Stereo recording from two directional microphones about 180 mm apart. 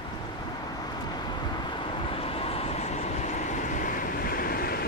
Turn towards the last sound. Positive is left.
turn(degrees=55)  # may be behind; listen again after turning